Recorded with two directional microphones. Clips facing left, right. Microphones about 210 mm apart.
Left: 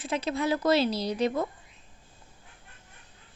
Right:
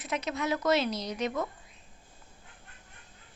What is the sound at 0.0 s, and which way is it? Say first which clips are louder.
A woman's voice: left 4 dB; 30° left (ahead or behind).